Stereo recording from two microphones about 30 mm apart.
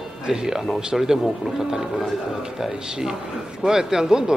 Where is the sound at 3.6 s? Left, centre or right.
Centre.